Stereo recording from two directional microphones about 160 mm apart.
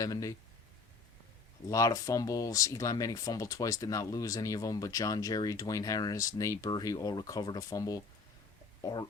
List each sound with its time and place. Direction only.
0.0 s speech: 20° left (ahead or behind)
1.6 s speech: 20° left (ahead or behind)